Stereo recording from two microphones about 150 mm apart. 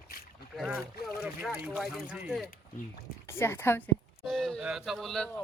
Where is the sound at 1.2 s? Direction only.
5° right (ahead or behind).